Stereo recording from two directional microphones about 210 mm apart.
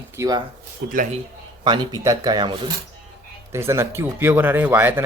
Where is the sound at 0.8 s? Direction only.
45° right (ahead or behind).